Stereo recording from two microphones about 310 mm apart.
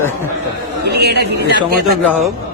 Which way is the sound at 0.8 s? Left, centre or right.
Right.